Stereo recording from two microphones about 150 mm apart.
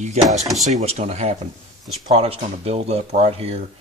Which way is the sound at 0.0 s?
50° right (ahead or behind).